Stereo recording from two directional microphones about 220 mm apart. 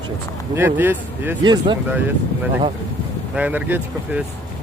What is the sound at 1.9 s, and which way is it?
Speech, 10° right (ahead or behind).